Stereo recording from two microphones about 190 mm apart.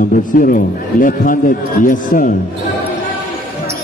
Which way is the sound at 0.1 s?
50° left (ahead or behind).